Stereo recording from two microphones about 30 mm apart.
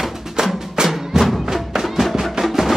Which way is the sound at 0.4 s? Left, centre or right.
Right.